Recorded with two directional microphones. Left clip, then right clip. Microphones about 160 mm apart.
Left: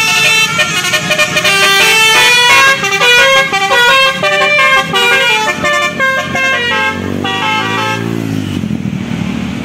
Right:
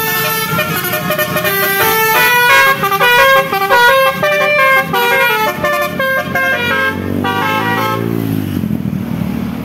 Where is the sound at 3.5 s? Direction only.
20° right (ahead or behind).